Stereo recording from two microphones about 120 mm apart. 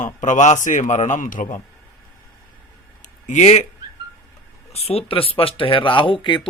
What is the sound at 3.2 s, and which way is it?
Speech, 80° left.